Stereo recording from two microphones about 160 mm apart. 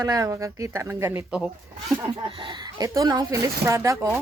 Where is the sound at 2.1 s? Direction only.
35° right (ahead or behind).